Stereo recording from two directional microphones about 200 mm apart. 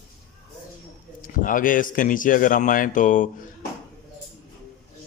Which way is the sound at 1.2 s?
45° left (ahead or behind).